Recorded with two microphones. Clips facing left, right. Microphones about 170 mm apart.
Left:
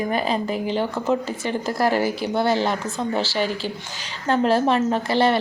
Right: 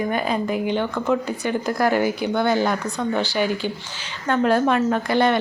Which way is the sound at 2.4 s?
30° left (ahead or behind).